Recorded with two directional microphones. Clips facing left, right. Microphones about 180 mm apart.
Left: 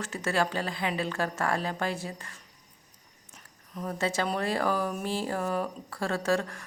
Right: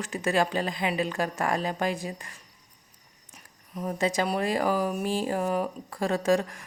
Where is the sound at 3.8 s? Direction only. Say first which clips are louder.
Right 3 dB; 15° right (ahead or behind).